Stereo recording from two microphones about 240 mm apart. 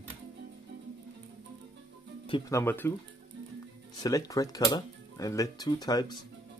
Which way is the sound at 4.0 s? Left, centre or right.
Centre.